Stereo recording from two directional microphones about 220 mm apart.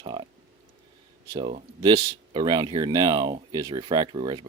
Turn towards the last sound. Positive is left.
turn(degrees=-20)  # may be behind; listen again after turning